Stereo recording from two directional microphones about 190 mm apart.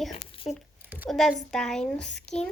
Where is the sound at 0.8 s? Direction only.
10° right (ahead or behind).